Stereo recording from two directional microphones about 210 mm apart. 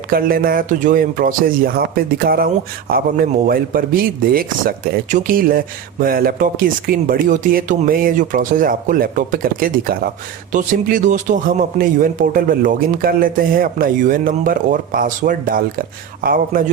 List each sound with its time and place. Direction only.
0.1 s a man's voice: 45° right (ahead or behind)